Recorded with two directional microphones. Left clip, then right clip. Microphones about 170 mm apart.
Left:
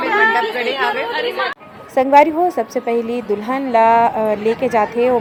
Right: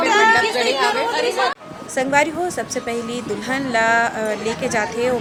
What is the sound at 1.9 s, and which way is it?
A woman's voice, 20° left (ahead or behind).